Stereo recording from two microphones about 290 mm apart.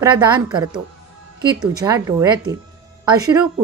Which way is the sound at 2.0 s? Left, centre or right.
Centre.